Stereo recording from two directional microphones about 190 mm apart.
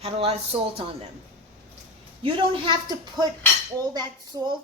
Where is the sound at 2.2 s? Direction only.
25° right (ahead or behind).